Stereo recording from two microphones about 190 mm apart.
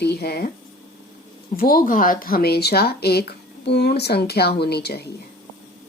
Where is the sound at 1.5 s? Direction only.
50° left (ahead or behind).